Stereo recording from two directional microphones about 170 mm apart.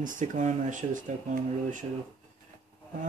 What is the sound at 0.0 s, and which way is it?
Speech, 50° right (ahead or behind).